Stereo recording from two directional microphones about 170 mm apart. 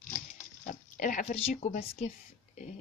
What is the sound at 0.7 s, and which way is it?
Speech, 50° left (ahead or behind).